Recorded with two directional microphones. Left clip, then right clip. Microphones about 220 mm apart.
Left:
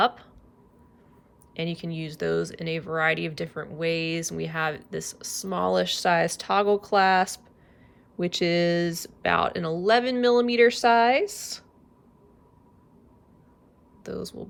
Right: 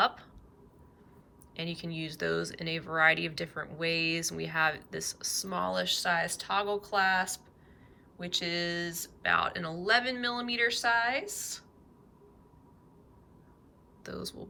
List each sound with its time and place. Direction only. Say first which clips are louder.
1.5 s speech: left 6 dB; 10° left (ahead or behind)
14.0 s speech: left 6 dB; 10° left (ahead or behind)